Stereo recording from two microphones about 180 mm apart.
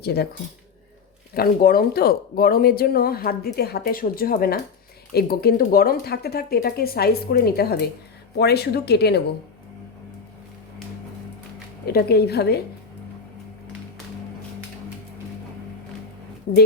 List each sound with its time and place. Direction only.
0.0 s speech: 60° left (ahead or behind)
1.3 s speech: 55° left (ahead or behind)
11.9 s speech: 60° left (ahead or behind)